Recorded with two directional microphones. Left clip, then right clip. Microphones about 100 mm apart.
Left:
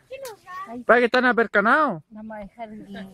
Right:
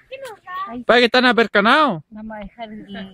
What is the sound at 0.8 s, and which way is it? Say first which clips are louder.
Speech: right 4 dB; 15° right (ahead or behind).